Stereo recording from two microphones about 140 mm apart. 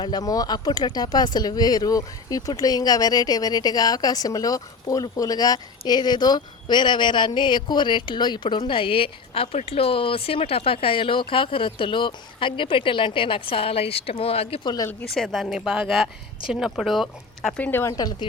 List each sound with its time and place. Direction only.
0.0 s a woman's voice: 30° left (ahead or behind)
15.1 s speech: centre (ahead or behind)
17.6 s speech: 15° left (ahead or behind)
17.9 s speech: 30° left (ahead or behind)